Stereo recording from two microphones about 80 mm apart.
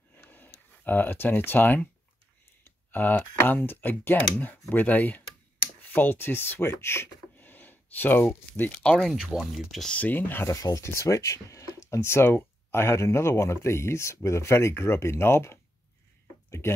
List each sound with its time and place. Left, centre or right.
0.2 s a sound: left
2.6 s speech: left
8.9 s speech: centre
9.9 s speech: left
10.5 s speech: left
16.4 s a sound: left